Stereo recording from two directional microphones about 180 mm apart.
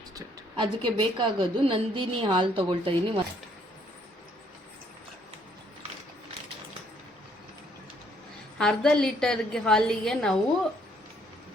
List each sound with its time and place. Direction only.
0.2 s a woman's voice: 25° right (ahead or behind)
8.5 s a woman's voice: 5° left (ahead or behind)